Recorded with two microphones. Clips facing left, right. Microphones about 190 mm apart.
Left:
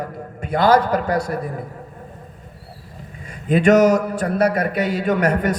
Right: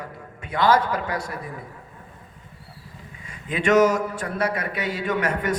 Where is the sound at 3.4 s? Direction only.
40° left (ahead or behind).